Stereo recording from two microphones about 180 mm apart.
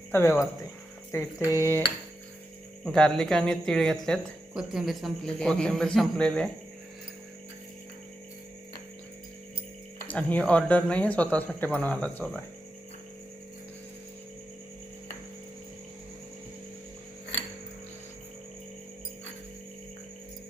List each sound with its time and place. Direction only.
0.1 s speech: 15° left (ahead or behind)
2.8 s speech: centre (ahead or behind)
10.1 s speech: 10° left (ahead or behind)